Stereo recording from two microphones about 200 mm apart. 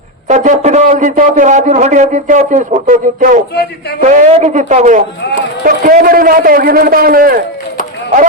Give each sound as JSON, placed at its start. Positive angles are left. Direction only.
{"t": 0.3, "sound": "a man's voice", "side_deg": -40}
{"t": 3.5, "sound": "speech", "side_deg": 55}
{"t": 4.0, "sound": "a man's voice", "side_deg": -40}